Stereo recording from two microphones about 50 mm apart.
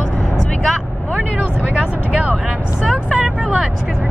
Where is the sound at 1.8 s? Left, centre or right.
Right.